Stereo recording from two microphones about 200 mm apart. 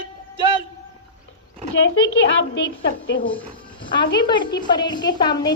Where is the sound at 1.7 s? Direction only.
70° left (ahead or behind).